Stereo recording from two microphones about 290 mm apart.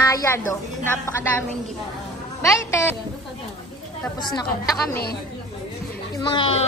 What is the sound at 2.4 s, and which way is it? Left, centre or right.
Speech, centre.